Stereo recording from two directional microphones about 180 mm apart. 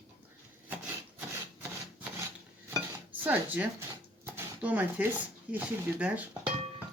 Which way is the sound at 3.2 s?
10° right (ahead or behind).